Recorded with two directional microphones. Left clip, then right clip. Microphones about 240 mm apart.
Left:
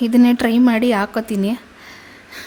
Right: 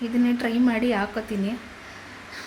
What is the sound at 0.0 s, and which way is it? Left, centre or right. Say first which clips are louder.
A woman's voice: left 9 dB; left.